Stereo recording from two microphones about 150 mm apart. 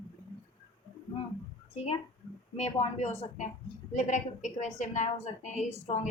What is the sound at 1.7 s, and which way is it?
A woman's voice, 45° left (ahead or behind).